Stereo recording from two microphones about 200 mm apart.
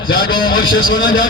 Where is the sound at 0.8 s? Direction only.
70° left (ahead or behind).